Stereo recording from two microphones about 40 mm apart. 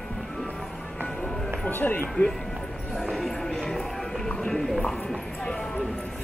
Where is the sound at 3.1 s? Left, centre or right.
Centre.